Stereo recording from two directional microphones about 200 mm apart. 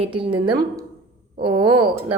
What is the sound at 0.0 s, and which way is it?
Speech, 25° right (ahead or behind).